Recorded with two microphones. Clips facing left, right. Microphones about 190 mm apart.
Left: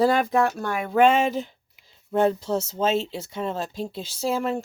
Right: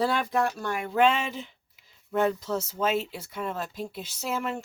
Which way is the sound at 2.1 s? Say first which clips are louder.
Left 4 dB; 30° left (ahead or behind).